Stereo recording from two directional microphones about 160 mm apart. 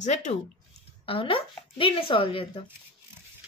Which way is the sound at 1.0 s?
35° left (ahead or behind).